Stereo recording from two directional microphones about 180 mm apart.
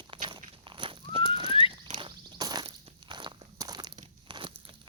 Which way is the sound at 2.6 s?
30° right (ahead or behind).